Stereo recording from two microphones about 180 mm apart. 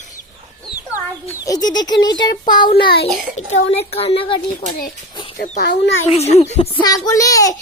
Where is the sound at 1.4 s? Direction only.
20° left (ahead or behind).